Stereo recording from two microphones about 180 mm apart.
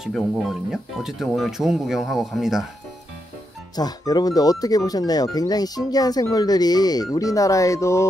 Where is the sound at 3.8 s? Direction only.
20° left (ahead or behind).